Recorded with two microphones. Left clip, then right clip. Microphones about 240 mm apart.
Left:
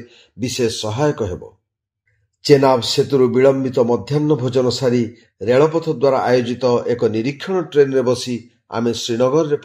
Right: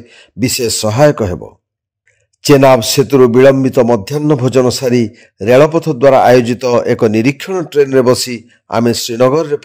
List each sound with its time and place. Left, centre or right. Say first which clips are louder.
0.1 s a man's voice: right 9 dB; right